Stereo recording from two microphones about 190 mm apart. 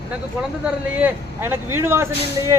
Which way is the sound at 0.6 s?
10° right (ahead or behind).